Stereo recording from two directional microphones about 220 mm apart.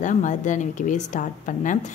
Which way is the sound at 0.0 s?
35° left (ahead or behind).